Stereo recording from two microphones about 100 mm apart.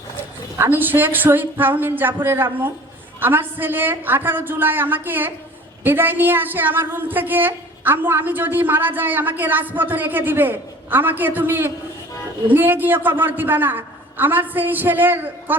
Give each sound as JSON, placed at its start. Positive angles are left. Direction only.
{"t": 0.6, "sound": "a woman's voice", "side_deg": -20}